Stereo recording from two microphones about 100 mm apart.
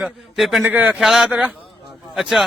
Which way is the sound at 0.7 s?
15° right (ahead or behind).